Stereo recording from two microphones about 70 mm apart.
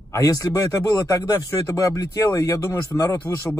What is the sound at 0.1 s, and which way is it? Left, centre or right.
Speech, left.